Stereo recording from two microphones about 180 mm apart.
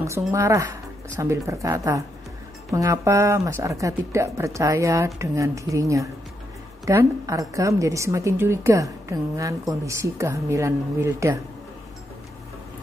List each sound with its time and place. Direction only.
0.3 s a woman's voice: 15° right (ahead or behind)